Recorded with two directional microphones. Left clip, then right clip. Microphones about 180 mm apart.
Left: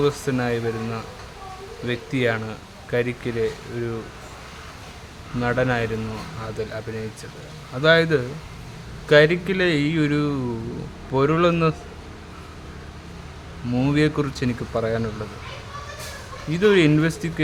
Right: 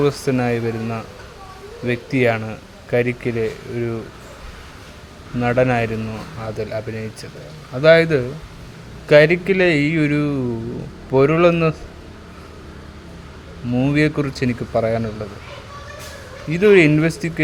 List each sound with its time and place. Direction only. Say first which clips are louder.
0.0 s speech: right 4 dB; 20° right (ahead or behind)
5.4 s speech: right 5 dB; 15° right (ahead or behind)
13.7 s speech: right 3 dB; 10° right (ahead or behind)
16.5 s speech: right 5 dB; 10° right (ahead or behind)